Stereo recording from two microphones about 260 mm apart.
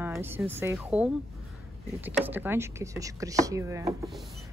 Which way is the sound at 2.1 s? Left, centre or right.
Centre.